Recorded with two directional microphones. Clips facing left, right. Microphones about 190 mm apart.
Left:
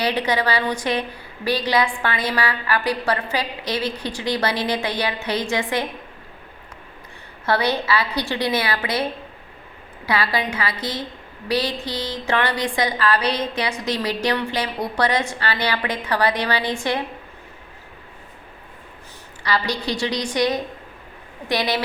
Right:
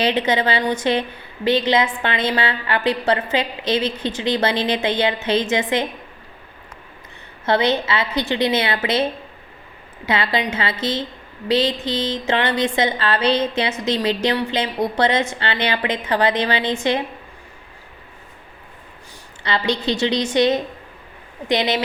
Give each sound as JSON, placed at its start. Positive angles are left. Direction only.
{"t": 0.0, "sound": "a woman's voice", "side_deg": -20}
{"t": 7.4, "sound": "a woman's voice", "side_deg": -20}
{"t": 10.1, "sound": "a woman's voice", "side_deg": -20}
{"t": 19.4, "sound": "a woman's voice", "side_deg": -25}